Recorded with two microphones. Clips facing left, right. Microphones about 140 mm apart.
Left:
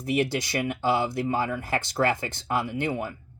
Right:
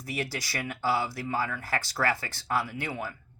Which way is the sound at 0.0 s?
25° left (ahead or behind).